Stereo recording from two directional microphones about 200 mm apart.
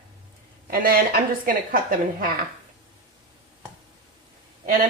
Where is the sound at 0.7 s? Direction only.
45° right (ahead or behind).